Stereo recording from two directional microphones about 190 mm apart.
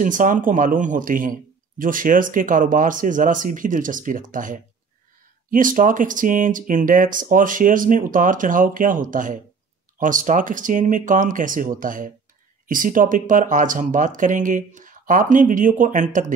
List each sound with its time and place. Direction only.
0.0 s speech: 45° right (ahead or behind)